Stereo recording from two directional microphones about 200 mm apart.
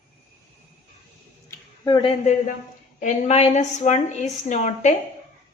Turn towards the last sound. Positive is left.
turn(degrees=35)  # may be behind; listen again after turning